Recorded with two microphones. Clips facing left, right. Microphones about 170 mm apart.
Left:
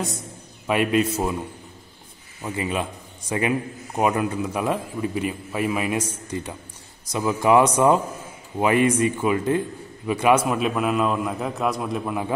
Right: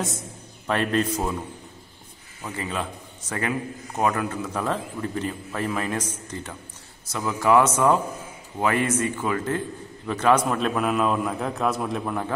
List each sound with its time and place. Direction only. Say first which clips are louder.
0.7 s a man's voice: left 3 dB; 10° left (ahead or behind)
2.4 s a man's voice: left 4 dB; 15° left (ahead or behind)